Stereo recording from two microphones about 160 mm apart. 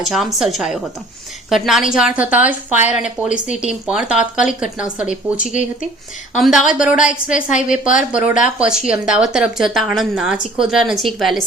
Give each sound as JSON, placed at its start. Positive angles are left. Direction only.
{"t": 0.0, "sound": "a woman's voice", "side_deg": 0}
{"t": 6.3, "sound": "speech", "side_deg": -5}
{"t": 7.5, "sound": "a woman's voice", "side_deg": 55}
{"t": 8.1, "sound": "a woman's voice", "side_deg": -5}